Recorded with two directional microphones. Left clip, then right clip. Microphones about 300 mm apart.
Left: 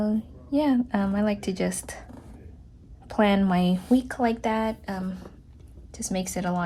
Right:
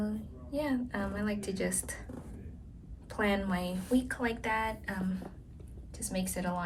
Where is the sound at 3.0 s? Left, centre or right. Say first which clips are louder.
Left 9 dB; centre.